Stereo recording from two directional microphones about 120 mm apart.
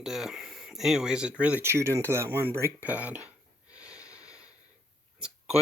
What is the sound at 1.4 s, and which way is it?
Speech, 15° right (ahead or behind).